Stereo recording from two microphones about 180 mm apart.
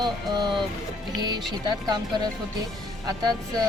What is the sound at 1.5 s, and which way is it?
Speech, 25° right (ahead or behind).